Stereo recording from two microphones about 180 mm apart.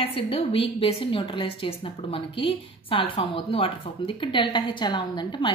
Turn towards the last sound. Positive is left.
turn(degrees=25)  # may be behind; listen again after turning